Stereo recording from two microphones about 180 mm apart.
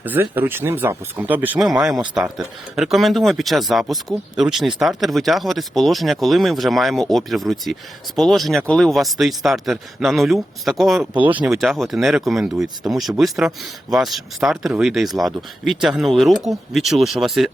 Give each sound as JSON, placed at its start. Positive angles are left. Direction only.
{"t": 0.0, "sound": "speech", "side_deg": -10}